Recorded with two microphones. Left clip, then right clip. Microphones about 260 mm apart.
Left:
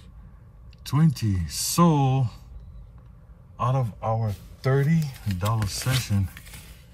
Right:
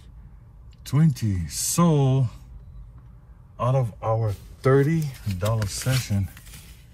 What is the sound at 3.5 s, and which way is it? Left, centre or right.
Speech, centre.